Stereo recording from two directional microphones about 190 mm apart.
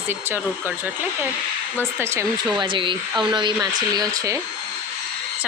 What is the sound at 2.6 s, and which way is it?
Speech, 25° right (ahead or behind).